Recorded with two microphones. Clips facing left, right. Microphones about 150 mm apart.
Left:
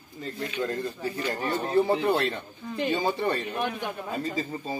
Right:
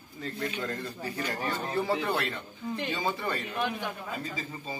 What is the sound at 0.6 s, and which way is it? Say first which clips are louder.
A man's voice: left 5 dB; 15° left (ahead or behind).